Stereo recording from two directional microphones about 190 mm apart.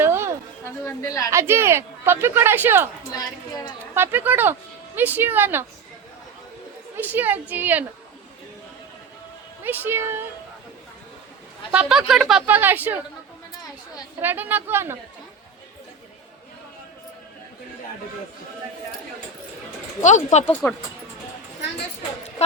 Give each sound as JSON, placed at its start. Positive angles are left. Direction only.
{"t": 0.0, "sound": "a sound", "side_deg": -15}
{"t": 0.9, "sound": "speech", "side_deg": 15}
{"t": 1.3, "sound": "a woman's voice", "side_deg": -15}
{"t": 3.1, "sound": "a woman's voice", "side_deg": 20}
{"t": 3.9, "sound": "a woman's voice", "side_deg": -10}
{"t": 6.9, "sound": "a woman's voice", "side_deg": -10}
{"t": 9.6, "sound": "a woman's voice", "side_deg": -10}
{"t": 11.7, "sound": "a woman's voice", "side_deg": -5}
{"t": 14.2, "sound": "a woman's voice", "side_deg": -10}
{"t": 20.0, "sound": "speech", "side_deg": 40}
{"t": 20.4, "sound": "speech", "side_deg": 5}